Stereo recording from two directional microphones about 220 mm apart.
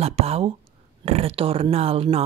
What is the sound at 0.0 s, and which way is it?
Speech, 30° right (ahead or behind).